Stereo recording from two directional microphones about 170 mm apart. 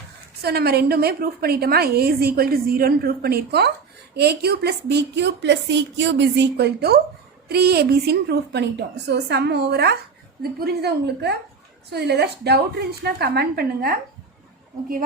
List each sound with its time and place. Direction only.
0.4 s a woman's voice: 65° right (ahead or behind)